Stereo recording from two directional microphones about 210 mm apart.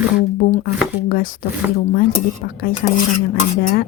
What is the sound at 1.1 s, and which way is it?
Speech, 40° left (ahead or behind).